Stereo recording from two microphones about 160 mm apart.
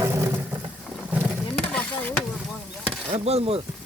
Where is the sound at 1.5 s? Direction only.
10° left (ahead or behind).